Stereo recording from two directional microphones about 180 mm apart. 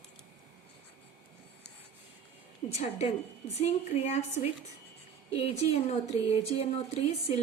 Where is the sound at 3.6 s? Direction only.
40° left (ahead or behind).